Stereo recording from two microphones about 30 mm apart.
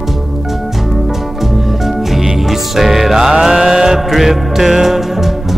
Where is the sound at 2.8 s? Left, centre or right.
Centre.